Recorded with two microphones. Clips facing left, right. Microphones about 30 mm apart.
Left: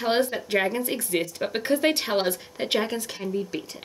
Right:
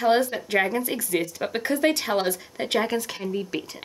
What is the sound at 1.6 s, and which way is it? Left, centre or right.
Speech, left.